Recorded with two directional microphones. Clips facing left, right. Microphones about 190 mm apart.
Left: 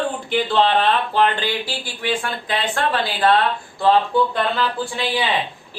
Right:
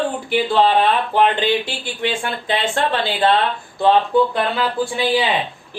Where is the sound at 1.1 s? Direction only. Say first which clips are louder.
Right 3 dB; 20° right (ahead or behind).